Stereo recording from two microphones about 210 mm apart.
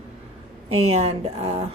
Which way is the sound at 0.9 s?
30° right (ahead or behind).